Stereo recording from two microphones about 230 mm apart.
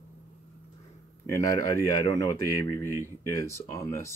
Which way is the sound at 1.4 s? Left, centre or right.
Centre.